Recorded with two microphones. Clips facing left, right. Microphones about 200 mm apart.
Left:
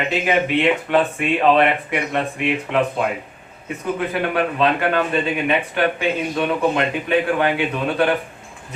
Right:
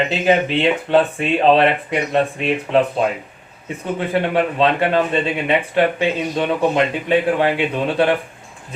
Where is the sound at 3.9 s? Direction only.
30° right (ahead or behind).